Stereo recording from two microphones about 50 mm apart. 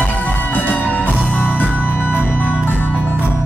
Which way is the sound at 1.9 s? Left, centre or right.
Left.